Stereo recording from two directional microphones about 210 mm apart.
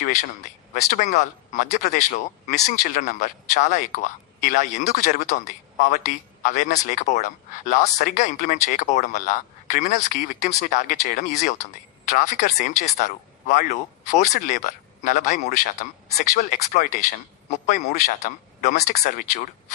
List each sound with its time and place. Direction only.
0.7 s speech: 40° left (ahead or behind)